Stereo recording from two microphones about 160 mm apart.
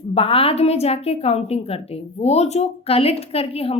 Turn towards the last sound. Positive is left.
turn(degrees=35)  # may be behind; listen again after turning